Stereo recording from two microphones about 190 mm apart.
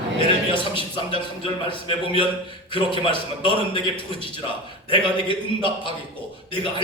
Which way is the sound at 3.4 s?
25° left (ahead or behind).